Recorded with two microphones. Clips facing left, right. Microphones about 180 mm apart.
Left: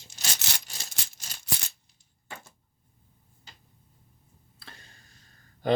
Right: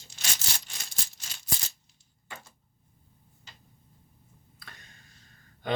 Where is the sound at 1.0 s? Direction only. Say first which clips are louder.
Even; 70° left (ahead or behind).